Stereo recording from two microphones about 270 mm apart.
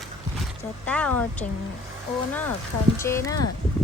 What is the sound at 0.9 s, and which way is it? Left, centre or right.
Speech, centre.